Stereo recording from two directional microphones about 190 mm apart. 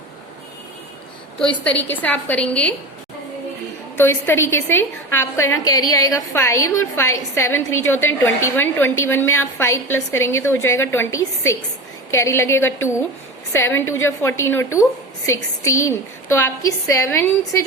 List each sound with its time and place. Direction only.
1.9 s a woman's voice: 10° left (ahead or behind)
3.9 s a woman's voice: 10° left (ahead or behind)